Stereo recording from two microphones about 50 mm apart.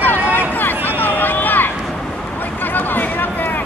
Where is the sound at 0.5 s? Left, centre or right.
Left.